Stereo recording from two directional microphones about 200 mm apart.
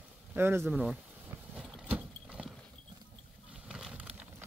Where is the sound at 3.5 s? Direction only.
5° right (ahead or behind).